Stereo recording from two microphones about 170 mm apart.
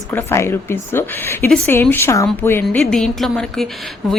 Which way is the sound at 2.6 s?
5° left (ahead or behind).